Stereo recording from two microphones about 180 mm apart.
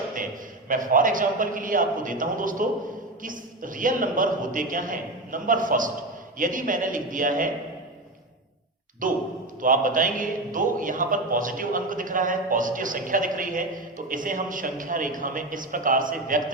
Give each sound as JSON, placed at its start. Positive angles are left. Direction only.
{"t": 0.7, "sound": "a man's voice", "side_deg": -50}
{"t": 9.0, "sound": "a man's voice", "side_deg": -50}